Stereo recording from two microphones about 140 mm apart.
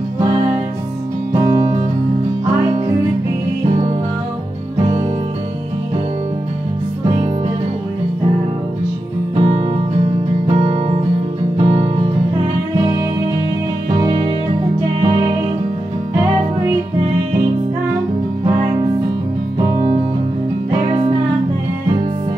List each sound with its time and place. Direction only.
9.4 s music: 45° right (ahead or behind)
20.8 s music: 40° right (ahead or behind)